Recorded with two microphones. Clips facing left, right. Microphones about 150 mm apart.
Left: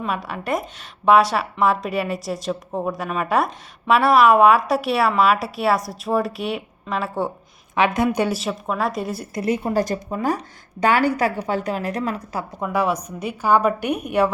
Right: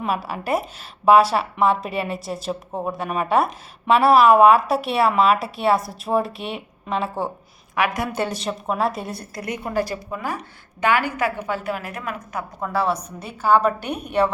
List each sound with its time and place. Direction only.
0.3 s a woman's voice: 5° right (ahead or behind)
7.8 s a woman's voice: 20° left (ahead or behind)
8.4 s a woman's voice: centre (ahead or behind)
9.3 s a woman's voice: 25° left (ahead or behind)
9.8 s a woman's voice: 40° left (ahead or behind)
12.7 s a woman's voice: 10° left (ahead or behind)